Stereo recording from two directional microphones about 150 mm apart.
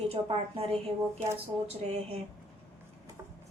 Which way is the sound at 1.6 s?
45° right (ahead or behind).